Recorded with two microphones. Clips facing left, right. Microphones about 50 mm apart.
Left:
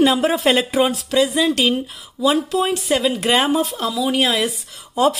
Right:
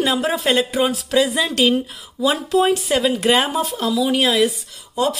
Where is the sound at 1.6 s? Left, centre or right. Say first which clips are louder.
Right 2 dB; centre.